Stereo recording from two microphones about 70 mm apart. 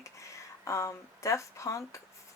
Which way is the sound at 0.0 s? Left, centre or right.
Left.